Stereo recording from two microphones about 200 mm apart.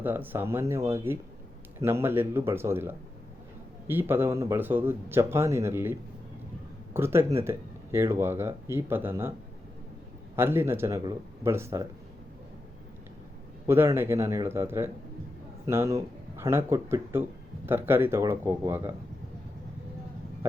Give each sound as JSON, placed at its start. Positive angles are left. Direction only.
{"t": 0.0, "sound": "speech", "side_deg": -10}
{"t": 10.3, "sound": "speech", "side_deg": -10}
{"t": 13.7, "sound": "speech", "side_deg": -10}